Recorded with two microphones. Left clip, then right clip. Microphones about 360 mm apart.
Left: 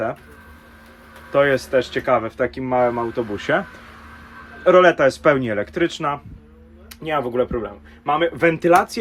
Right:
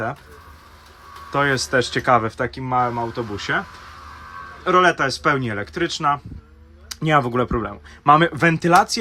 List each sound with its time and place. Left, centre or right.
1.3 s speech: centre
4.6 s speech: centre